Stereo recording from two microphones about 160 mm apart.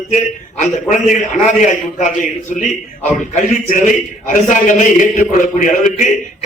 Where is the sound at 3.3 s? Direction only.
50° left (ahead or behind).